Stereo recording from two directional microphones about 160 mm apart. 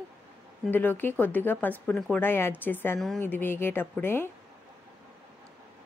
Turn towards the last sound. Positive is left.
turn(degrees=15)  # may be behind; listen again after turning